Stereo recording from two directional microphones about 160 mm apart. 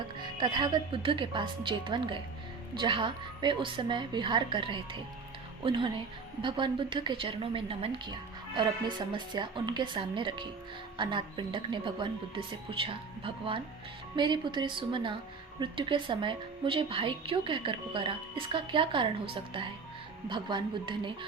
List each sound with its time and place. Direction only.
0.3 s a woman's voice: 25° right (ahead or behind)